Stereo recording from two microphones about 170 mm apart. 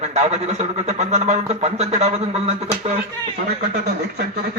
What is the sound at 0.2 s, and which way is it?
A man's voice, 40° right (ahead or behind).